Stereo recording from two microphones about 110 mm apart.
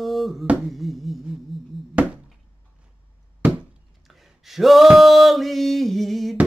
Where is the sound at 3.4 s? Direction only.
10° right (ahead or behind).